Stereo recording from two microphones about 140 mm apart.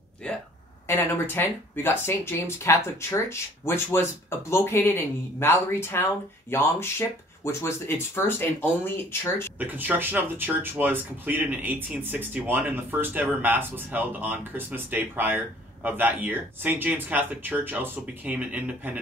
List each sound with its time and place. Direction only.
0.2 s speech: 5° left (ahead or behind)
9.6 s speech: 15° right (ahead or behind)